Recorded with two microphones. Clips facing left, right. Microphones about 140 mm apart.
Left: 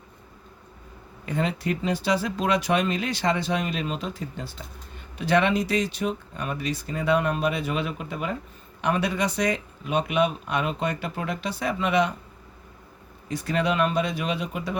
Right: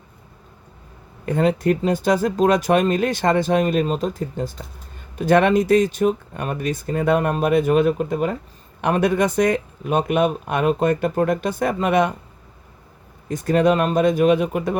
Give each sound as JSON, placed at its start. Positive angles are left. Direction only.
{"t": 1.2, "sound": "speech", "side_deg": -50}
{"t": 13.2, "sound": "speech", "side_deg": -45}